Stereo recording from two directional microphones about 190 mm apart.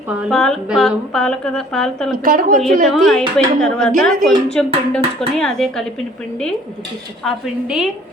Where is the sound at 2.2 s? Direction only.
45° right (ahead or behind).